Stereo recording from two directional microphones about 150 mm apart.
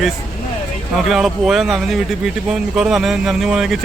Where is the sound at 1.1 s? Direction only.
5° right (ahead or behind).